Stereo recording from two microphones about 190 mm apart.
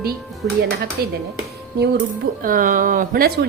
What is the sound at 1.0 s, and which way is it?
Speech, 55° right (ahead or behind).